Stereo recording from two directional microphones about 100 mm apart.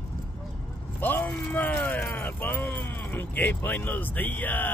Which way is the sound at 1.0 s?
20° left (ahead or behind).